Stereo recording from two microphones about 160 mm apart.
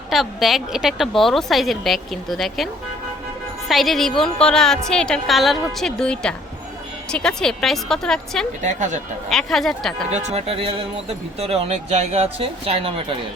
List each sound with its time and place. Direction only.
0.1 s a woman's voice: centre (ahead or behind)
3.7 s a woman's voice: centre (ahead or behind)
8.6 s speech: 50° right (ahead or behind)
9.3 s a woman's voice: centre (ahead or behind)
10.1 s speech: 45° right (ahead or behind)